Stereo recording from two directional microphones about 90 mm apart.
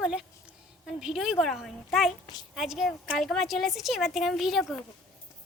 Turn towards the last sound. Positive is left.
turn(degrees=0)  # may be behind; listen again after turning